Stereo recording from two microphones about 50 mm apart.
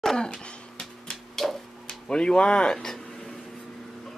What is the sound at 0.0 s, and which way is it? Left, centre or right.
Cough, centre.